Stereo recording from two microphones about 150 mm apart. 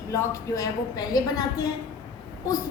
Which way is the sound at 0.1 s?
20° left (ahead or behind).